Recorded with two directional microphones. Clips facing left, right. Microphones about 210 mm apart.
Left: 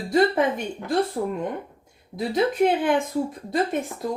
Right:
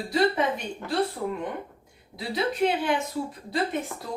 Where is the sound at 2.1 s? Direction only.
50° left (ahead or behind).